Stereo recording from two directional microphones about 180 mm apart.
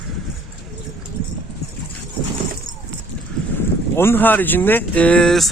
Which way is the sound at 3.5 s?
10° left (ahead or behind).